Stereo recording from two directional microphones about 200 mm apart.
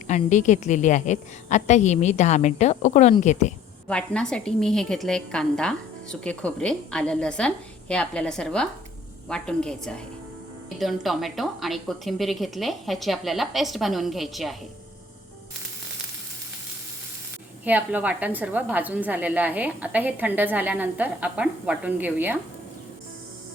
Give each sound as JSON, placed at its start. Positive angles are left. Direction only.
{"t": 0.1, "sound": "a woman's voice", "side_deg": 35}
{"t": 3.8, "sound": "a woman's voice", "side_deg": 5}
{"t": 17.7, "sound": "a woman's voice", "side_deg": -10}